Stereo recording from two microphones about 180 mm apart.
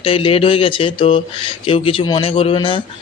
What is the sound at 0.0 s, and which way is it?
Speech, 30° left (ahead or behind).